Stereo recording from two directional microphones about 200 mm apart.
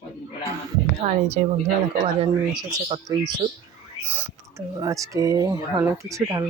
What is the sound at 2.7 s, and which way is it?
Speech, 20° right (ahead or behind).